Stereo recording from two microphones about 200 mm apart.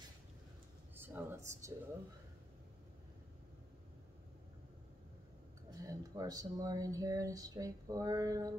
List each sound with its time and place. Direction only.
0.9 s speech: 10° right (ahead or behind)
5.7 s speech: 15° right (ahead or behind)